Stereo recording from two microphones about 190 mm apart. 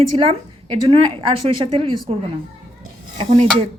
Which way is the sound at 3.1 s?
30° right (ahead or behind).